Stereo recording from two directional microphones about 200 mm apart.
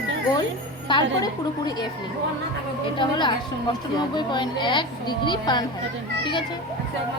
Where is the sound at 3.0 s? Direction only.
25° left (ahead or behind).